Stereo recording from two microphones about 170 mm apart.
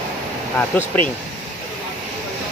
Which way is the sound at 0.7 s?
10° left (ahead or behind).